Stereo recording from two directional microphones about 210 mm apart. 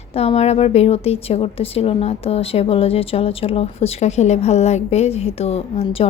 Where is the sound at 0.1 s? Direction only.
30° left (ahead or behind).